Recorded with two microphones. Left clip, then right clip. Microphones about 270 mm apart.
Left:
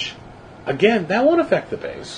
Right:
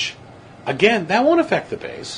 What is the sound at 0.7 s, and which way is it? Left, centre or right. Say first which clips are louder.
A man's voice: right 1 dB; right.